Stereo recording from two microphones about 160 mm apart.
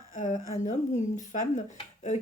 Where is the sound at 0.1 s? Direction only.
55° left (ahead or behind).